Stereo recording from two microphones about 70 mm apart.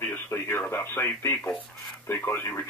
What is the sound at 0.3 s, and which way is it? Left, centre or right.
Speech, left.